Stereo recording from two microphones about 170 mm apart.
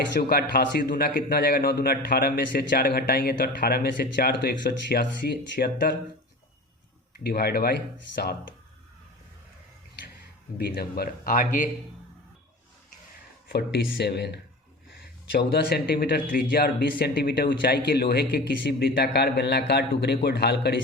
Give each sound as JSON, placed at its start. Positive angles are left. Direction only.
{"t": 0.2, "sound": "a man's voice", "side_deg": 65}
{"t": 7.3, "sound": "a man's voice", "side_deg": 70}
{"t": 10.6, "sound": "a man's voice", "side_deg": 70}
{"t": 13.5, "sound": "a man's voice", "side_deg": 75}